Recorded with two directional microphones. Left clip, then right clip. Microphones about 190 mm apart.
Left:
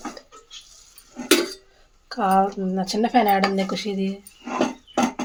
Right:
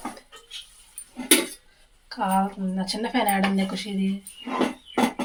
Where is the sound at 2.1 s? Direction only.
50° left (ahead or behind).